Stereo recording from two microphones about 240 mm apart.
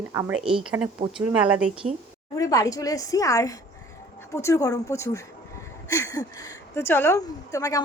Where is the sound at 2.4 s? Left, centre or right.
Centre.